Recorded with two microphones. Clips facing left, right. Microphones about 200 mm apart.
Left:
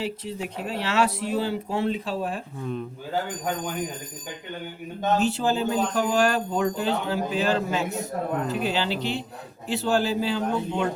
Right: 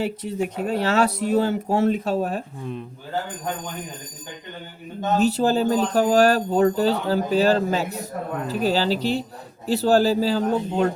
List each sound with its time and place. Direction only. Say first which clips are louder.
0.0 s speech: right 5 dB; 45° right (ahead or behind)
5.2 s speech: right 4 dB; 40° right (ahead or behind)